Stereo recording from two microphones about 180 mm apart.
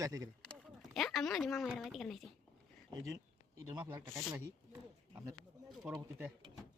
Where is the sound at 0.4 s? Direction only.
Centre (ahead or behind).